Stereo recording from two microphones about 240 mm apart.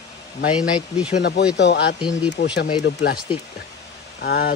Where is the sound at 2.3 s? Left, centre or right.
Left.